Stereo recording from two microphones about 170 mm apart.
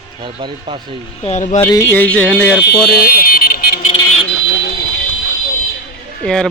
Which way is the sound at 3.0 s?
60° left (ahead or behind).